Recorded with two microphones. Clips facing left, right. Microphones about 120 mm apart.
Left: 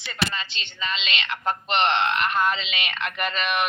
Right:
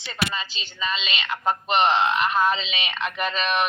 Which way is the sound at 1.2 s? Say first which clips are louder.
Right 4 dB; 15° right (ahead or behind).